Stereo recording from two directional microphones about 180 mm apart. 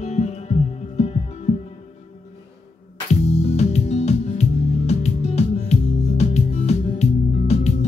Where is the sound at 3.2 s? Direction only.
35° left (ahead or behind).